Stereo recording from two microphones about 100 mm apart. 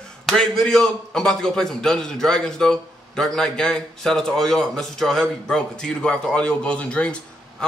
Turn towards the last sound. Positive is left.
turn(degrees=10)  # may be behind; listen again after turning